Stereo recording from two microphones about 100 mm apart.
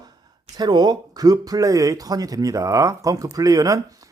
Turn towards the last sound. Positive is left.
turn(degrees=-35)  # may be behind; listen again after turning